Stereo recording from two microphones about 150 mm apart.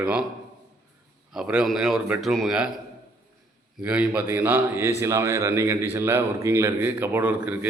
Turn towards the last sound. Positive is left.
turn(degrees=-10)  # may be behind; listen again after turning